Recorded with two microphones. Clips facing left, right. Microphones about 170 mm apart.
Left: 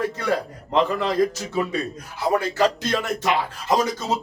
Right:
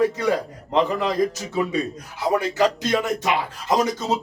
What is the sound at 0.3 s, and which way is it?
Speech, 15° right (ahead or behind).